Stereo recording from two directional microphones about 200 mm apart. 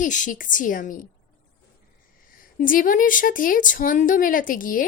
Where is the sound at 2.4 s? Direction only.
45° left (ahead or behind).